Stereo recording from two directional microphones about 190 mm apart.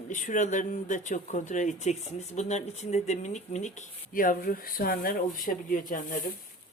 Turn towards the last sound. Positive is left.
turn(degrees=45)  # may be behind; listen again after turning